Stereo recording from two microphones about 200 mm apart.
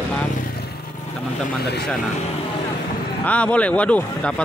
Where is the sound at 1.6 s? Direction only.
55° left (ahead or behind).